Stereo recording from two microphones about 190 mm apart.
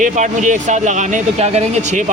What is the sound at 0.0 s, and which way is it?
Speech, 40° right (ahead or behind).